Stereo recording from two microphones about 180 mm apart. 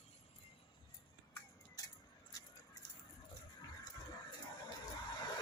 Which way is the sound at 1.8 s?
20° left (ahead or behind).